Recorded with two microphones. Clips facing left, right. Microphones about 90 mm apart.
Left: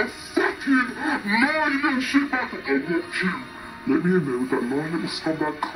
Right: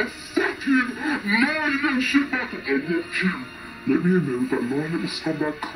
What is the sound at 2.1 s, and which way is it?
Speech, 25° left (ahead or behind).